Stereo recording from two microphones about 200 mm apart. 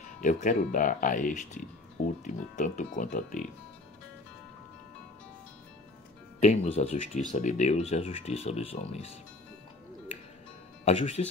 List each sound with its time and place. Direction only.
0.2 s speech: 40° left (ahead or behind)
6.4 s speech: 35° left (ahead or behind)
10.9 s speech: 30° left (ahead or behind)